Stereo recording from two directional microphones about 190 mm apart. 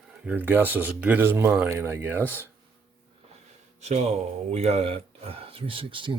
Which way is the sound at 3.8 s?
35° right (ahead or behind).